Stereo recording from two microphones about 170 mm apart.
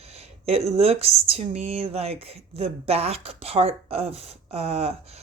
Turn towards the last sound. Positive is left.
turn(degrees=-35)  # may be behind; listen again after turning